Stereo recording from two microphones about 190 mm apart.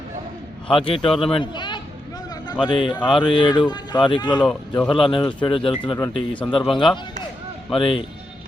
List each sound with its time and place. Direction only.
0.7 s speech: 30° left (ahead or behind)
6.0 s speech: 5° left (ahead or behind)
6.7 s speech: 25° left (ahead or behind)